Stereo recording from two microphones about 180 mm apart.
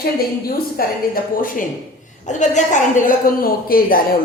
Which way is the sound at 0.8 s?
55° left (ahead or behind).